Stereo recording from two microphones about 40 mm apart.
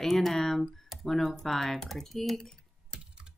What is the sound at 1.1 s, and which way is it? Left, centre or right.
Speech, centre.